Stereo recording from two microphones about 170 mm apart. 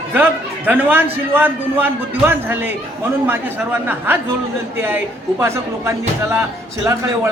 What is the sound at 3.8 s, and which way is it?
Speech, 10° right (ahead or behind).